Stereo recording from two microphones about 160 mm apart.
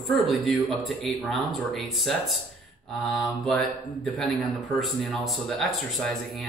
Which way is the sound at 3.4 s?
Centre (ahead or behind).